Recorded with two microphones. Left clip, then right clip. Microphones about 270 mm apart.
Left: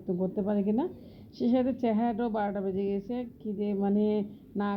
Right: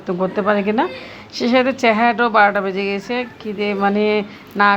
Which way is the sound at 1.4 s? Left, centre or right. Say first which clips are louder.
Right 13 dB; centre.